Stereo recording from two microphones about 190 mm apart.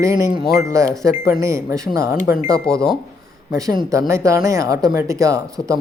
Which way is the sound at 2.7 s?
15° right (ahead or behind).